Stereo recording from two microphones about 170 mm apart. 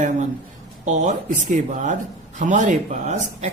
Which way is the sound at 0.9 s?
45° right (ahead or behind).